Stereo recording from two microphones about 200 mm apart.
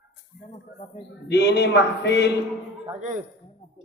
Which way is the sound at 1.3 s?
55° left (ahead or behind).